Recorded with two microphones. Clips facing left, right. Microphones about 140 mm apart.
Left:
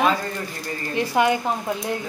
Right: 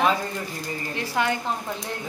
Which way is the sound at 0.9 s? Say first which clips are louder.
Left 6 dB; 15° left (ahead or behind).